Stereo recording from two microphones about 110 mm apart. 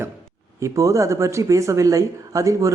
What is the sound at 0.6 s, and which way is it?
Speech, 30° right (ahead or behind).